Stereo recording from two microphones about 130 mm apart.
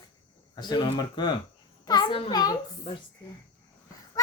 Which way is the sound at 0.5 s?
35° left (ahead or behind).